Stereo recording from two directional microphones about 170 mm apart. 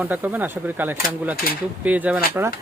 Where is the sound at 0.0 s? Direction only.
10° right (ahead or behind).